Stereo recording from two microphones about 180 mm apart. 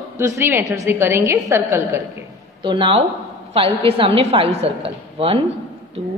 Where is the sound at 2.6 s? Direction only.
25° right (ahead or behind).